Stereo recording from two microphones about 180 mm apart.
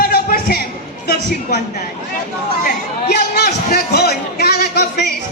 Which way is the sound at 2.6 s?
60° left (ahead or behind).